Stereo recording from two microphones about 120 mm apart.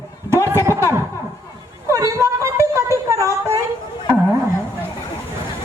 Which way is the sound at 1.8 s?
25° right (ahead or behind).